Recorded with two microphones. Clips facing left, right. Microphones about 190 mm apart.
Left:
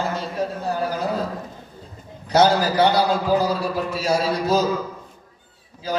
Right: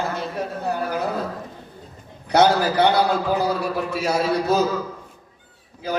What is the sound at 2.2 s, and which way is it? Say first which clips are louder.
A man's voice: even; 60° right (ahead or behind).